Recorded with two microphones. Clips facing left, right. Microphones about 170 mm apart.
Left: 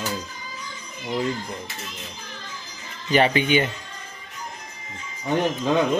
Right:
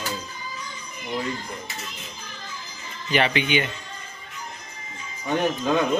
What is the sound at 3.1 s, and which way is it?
Speech, 40° left (ahead or behind).